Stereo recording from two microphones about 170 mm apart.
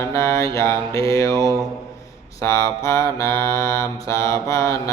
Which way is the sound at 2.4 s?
15° left (ahead or behind).